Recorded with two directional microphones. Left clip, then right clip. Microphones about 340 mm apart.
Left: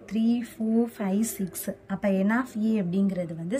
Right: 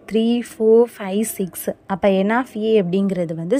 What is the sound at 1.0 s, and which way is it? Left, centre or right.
A woman's voice, centre.